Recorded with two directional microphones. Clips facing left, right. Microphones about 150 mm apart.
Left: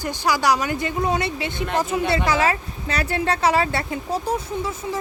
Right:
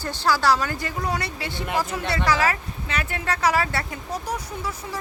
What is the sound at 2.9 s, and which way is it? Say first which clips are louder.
Speech: left 5 dB; 35° left (ahead or behind).